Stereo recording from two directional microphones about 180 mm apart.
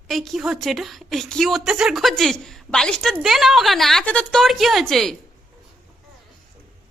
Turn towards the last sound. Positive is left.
turn(degrees=0)  # may be behind; listen again after turning